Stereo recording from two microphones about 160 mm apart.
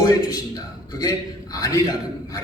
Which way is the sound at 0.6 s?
20° left (ahead or behind).